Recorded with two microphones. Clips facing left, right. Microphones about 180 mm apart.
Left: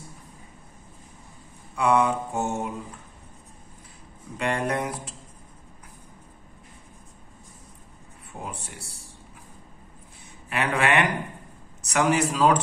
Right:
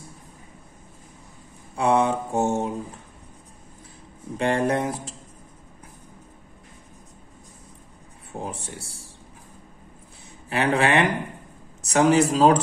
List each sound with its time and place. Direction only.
1.8 s mantra: 30° right (ahead or behind)
4.4 s mantra: 30° right (ahead or behind)
8.3 s mantra: 30° right (ahead or behind)
10.5 s mantra: 30° right (ahead or behind)
11.9 s speech: 30° right (ahead or behind)